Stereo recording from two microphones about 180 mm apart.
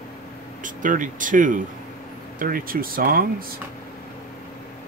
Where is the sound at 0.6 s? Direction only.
45° right (ahead or behind).